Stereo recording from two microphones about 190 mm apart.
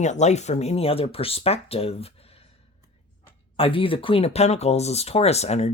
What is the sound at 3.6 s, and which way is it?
Speech, 30° left (ahead or behind).